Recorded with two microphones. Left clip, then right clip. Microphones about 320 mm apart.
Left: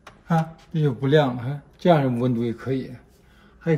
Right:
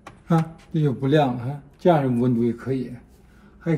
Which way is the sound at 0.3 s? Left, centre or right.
Left.